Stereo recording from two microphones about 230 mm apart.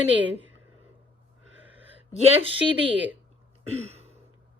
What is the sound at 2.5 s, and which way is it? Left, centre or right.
Speech, centre.